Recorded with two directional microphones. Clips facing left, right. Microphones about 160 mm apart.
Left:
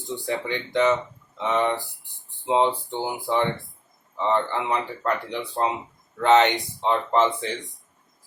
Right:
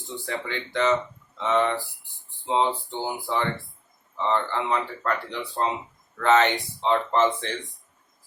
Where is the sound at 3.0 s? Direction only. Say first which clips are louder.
Left 3 dB; 15° left (ahead or behind).